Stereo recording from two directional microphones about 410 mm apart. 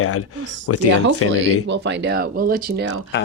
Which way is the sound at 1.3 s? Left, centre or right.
Right.